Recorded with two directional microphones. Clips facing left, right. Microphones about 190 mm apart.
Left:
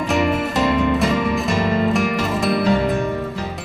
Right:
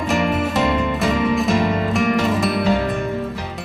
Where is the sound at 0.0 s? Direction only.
Centre (ahead or behind).